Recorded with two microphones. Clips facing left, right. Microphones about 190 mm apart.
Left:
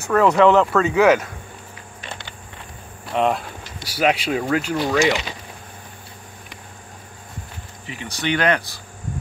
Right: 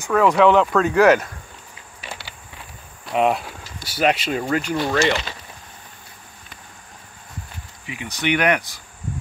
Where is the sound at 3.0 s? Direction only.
5° right (ahead or behind).